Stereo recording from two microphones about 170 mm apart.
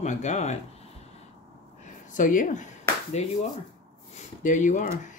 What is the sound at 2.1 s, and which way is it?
Speech, 50° left (ahead or behind).